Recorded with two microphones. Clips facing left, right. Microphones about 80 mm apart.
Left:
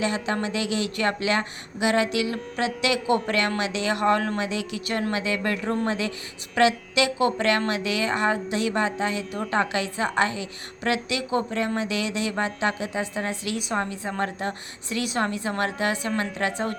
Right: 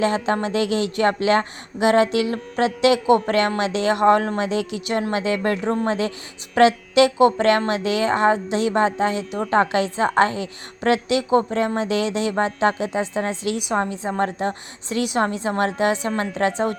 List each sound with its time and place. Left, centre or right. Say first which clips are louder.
0.0 s a woman's voice: right 5 dB; right
4.9 s a woman's voice: right 3 dB; right
5.1 s a woman's voice: right 5 dB; right
13.6 s a woman's voice: right 5 dB; right